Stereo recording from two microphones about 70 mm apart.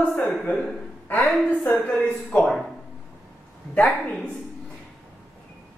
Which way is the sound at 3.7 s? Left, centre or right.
Centre.